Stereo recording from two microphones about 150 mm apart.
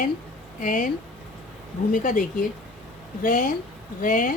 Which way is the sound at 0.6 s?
60° left (ahead or behind).